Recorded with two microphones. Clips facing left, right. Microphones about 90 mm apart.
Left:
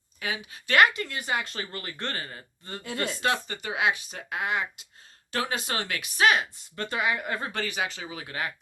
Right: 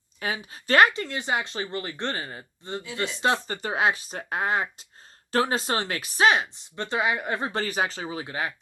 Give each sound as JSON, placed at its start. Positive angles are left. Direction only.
{"t": 0.2, "sound": "speech", "side_deg": -35}
{"t": 3.4, "sound": "speech", "side_deg": -40}